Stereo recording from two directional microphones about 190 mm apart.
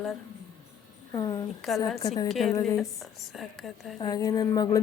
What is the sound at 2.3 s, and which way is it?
Speech, centre (ahead or behind).